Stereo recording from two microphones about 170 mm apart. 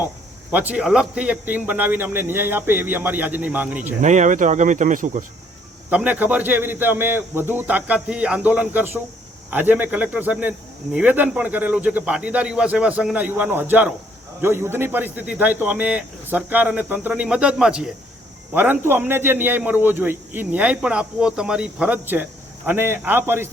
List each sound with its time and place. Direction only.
0.5 s a man's voice: 10° right (ahead or behind)
4.0 s speech: 45° right (ahead or behind)
5.9 s a man's voice: 10° right (ahead or behind)